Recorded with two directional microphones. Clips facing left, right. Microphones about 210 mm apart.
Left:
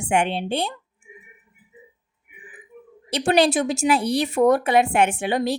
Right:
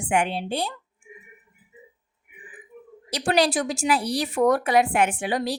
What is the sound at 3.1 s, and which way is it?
Speech, 25° left (ahead or behind).